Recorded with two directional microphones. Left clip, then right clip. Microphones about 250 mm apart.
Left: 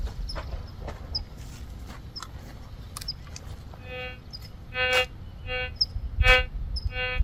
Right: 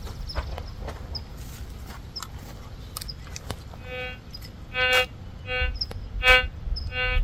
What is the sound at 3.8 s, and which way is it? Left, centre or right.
Music, centre.